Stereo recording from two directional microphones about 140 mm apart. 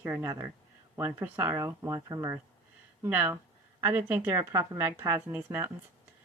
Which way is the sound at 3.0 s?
15° right (ahead or behind).